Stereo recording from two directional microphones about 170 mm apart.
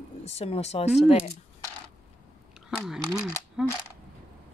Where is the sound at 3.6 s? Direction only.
5° right (ahead or behind).